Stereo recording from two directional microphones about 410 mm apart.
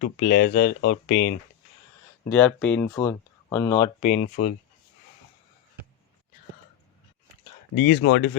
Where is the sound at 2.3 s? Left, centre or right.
Centre.